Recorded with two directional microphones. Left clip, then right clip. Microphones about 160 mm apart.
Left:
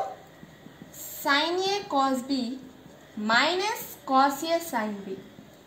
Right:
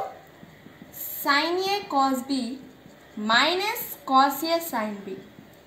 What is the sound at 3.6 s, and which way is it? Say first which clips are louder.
A child's voice: right 1 dB; 25° left (ahead or behind).